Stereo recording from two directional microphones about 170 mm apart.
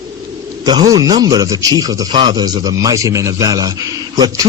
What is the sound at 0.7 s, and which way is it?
A man's voice, 25° right (ahead or behind).